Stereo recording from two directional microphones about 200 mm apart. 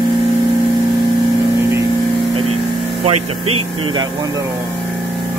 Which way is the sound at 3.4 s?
90° right.